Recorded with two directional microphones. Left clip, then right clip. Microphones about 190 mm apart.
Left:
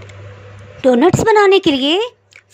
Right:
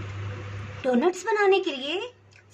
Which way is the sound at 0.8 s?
40° left (ahead or behind).